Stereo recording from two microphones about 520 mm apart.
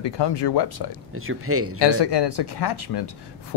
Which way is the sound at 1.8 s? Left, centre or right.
Left.